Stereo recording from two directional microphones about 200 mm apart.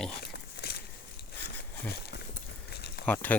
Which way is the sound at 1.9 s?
55° left (ahead or behind).